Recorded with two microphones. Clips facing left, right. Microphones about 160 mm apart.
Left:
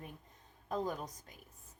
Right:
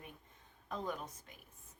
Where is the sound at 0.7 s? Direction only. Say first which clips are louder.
Left 4 dB; 40° left (ahead or behind).